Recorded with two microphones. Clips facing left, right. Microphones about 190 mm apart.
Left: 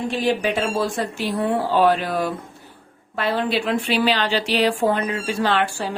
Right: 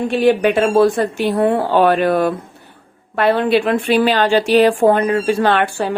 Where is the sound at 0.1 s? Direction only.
60° right (ahead or behind).